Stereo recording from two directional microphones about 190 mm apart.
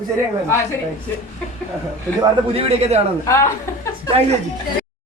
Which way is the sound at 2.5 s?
30° right (ahead or behind).